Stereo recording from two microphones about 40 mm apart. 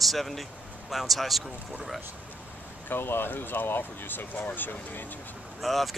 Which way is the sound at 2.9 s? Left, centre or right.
Left.